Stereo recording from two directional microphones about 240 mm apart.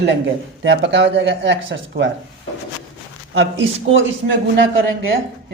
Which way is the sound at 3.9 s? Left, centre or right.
Right.